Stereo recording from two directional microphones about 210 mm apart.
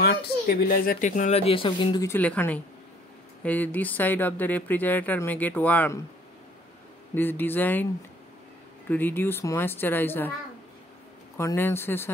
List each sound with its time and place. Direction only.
0.0 s speech: 50° left (ahead or behind); by 2.0 s 25° left (ahead or behind)
2.0 s speech: 10° left (ahead or behind)
7.2 s speech: 10° left (ahead or behind)
11.3 s speech: 10° left (ahead or behind)